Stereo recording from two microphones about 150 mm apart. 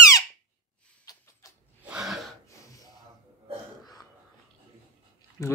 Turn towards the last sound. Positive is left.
turn(degrees=20)  # may be behind; listen again after turning